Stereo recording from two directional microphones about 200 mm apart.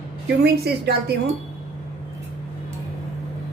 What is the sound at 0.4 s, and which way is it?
Speech, 55° right (ahead or behind).